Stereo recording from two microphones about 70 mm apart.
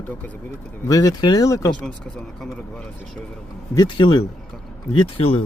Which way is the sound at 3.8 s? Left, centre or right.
Left.